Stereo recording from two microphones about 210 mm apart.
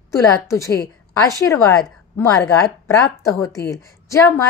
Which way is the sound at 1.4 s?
15° left (ahead or behind).